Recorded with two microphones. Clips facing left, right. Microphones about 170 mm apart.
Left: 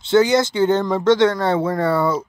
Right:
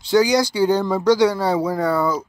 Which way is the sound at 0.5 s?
5° right (ahead or behind).